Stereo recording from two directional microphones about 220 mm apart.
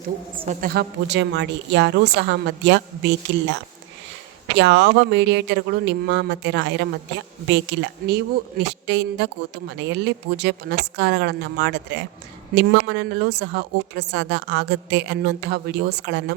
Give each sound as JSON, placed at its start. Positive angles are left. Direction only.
{"t": 0.6, "sound": "a woman's voice", "side_deg": -45}